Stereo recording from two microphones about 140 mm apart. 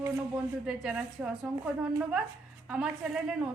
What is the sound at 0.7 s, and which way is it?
A woman's voice, 5° right (ahead or behind).